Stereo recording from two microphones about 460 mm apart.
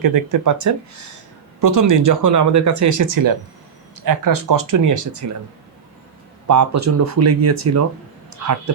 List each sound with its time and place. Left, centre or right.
0.0 s speech: right
6.5 s speech: right